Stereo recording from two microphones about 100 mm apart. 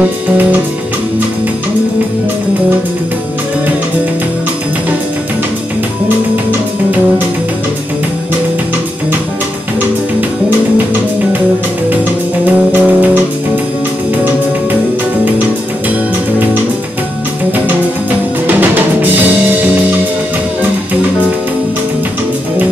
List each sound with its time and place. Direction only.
12.7 s music: 15° right (ahead or behind)
18.5 s music: 20° right (ahead or behind)